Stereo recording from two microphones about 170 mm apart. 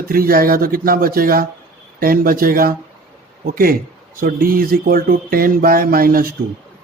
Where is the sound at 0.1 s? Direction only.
60° right (ahead or behind).